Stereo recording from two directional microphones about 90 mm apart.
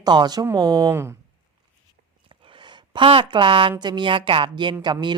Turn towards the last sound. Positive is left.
turn(degrees=-60)  # may be behind; listen again after turning